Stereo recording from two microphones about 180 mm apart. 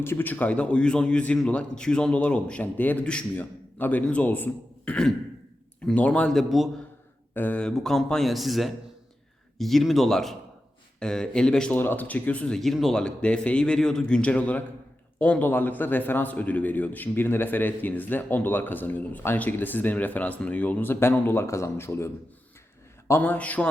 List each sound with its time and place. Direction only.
0.0 s a man's voice: 10° left (ahead or behind)